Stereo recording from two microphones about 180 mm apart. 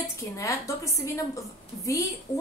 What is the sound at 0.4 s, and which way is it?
A woman's voice, 15° left (ahead or behind).